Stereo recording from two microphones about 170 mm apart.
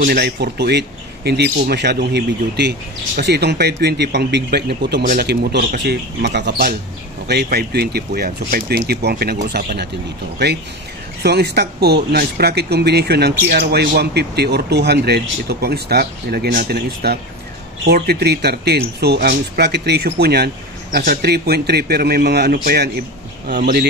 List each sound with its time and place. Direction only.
0.0 s speech: 70° right (ahead or behind)
10.4 s speech: 85° right
11.2 s speech: 75° right (ahead or behind)